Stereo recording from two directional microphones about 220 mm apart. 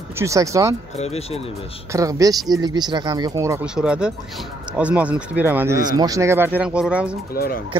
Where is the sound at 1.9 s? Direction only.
15° right (ahead or behind).